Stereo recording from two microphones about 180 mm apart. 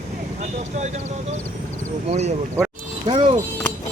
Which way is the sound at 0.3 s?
40° right (ahead or behind).